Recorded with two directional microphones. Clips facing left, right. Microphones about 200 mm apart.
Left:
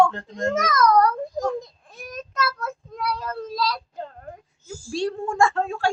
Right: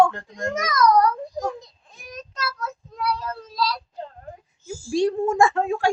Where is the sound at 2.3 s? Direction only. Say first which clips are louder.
Left 4 dB; 55° left (ahead or behind).